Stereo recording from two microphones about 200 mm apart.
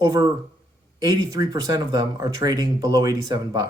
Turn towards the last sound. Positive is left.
turn(degrees=-20)  # may be behind; listen again after turning